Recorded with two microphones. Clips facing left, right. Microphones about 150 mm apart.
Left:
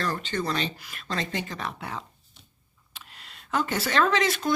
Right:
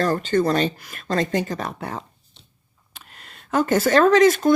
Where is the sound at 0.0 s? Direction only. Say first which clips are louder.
Right 9 dB; 45° right (ahead or behind).